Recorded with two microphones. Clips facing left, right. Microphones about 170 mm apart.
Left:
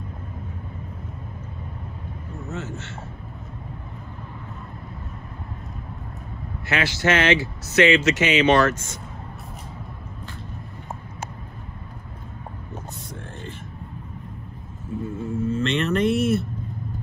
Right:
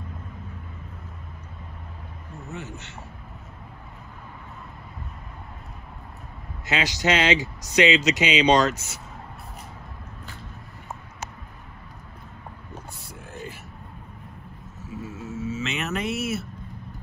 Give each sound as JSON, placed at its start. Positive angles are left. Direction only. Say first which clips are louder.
{"t": 2.5, "sound": "speech", "louder": "left 4 dB", "side_deg": -15}
{"t": 6.7, "sound": "speech", "louder": "left 2 dB", "side_deg": -15}
{"t": 14.9, "sound": "a sound", "louder": "left 7 dB", "side_deg": -5}
{"t": 15.4, "sound": "speech", "louder": "left 6 dB", "side_deg": -5}